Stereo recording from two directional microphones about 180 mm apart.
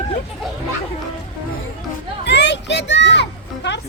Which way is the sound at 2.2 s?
70° left (ahead or behind).